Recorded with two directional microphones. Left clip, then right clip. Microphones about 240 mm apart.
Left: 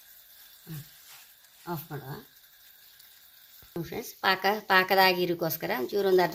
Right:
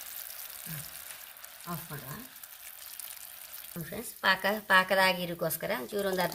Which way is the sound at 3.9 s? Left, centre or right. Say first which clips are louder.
Left 1 dB; left.